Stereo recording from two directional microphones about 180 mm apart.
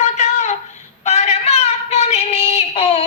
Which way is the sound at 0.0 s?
40° left (ahead or behind).